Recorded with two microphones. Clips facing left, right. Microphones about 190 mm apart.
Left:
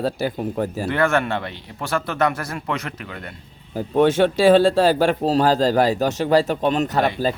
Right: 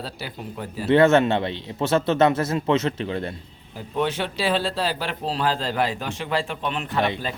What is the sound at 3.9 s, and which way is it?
A man's voice, 45° left (ahead or behind).